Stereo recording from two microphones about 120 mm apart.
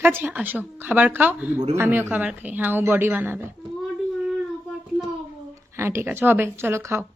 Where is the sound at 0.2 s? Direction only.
15° right (ahead or behind).